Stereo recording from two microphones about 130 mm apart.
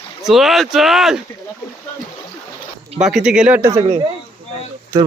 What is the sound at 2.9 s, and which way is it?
Speech, 5° right (ahead or behind).